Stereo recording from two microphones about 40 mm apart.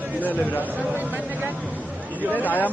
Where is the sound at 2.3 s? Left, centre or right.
Left.